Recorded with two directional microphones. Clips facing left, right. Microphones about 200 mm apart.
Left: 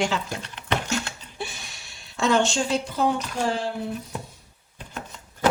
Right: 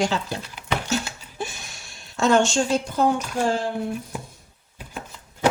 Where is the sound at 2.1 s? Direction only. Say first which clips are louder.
Right 3 dB; 45° right (ahead or behind).